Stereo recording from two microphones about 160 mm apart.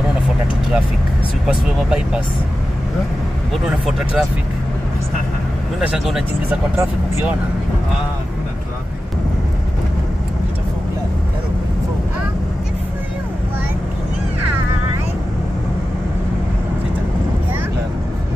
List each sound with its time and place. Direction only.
1.5 s speech: 5° right (ahead or behind)
3.5 s speech: 5° right (ahead or behind)
5.8 s speech: centre (ahead or behind)
6.8 s speech: 15° right (ahead or behind)